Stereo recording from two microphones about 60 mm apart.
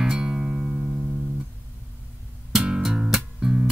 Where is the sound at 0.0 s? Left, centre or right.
Centre.